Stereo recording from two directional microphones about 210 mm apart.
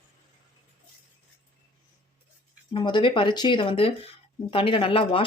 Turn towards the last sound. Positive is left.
turn(degrees=25)  # may be behind; listen again after turning